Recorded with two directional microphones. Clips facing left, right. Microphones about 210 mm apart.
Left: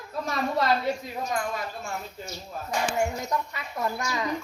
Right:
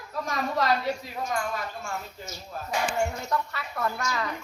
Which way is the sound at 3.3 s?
15° left (ahead or behind).